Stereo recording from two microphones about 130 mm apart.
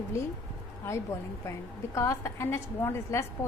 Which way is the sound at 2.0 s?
20° left (ahead or behind).